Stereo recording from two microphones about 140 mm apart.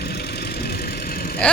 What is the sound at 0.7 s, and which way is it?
Vehicle, 90° left.